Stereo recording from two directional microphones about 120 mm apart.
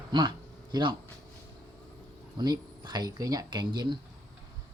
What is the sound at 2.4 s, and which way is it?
Speech, 35° right (ahead or behind).